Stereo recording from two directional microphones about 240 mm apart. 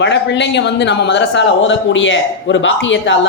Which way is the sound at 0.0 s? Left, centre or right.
Left.